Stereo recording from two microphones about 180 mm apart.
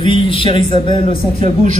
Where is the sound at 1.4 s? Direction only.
45° right (ahead or behind).